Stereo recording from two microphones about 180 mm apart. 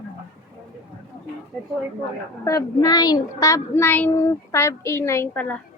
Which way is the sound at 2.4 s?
20° left (ahead or behind).